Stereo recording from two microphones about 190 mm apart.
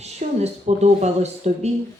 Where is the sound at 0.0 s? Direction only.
35° right (ahead or behind).